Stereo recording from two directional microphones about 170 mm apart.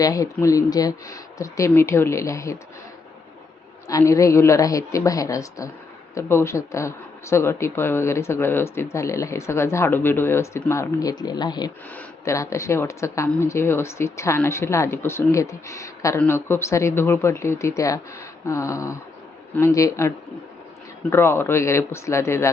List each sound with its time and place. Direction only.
0.0 s a woman's voice: 20° left (ahead or behind)
3.8 s a woman's voice: 20° left (ahead or behind)
11.9 s speech: 15° left (ahead or behind)